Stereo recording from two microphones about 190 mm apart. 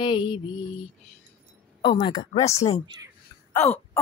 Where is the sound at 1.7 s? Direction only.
25° left (ahead or behind).